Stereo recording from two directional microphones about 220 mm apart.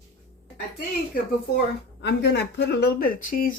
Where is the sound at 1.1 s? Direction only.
50° left (ahead or behind).